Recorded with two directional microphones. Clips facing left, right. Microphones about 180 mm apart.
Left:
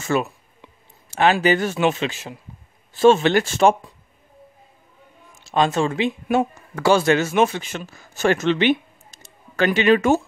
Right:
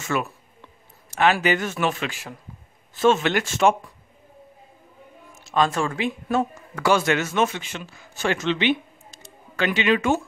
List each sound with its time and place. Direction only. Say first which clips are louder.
0.0 s speech: left 4 dB; 30° left (ahead or behind)
5.4 s a man's voice: left 3 dB; 30° left (ahead or behind)